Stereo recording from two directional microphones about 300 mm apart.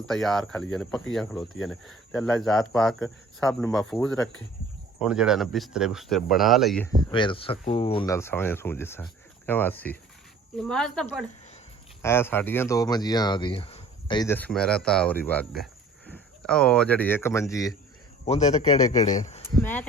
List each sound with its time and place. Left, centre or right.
0.0 s speech: centre
7.1 s speech: centre
18.3 s a man's voice: left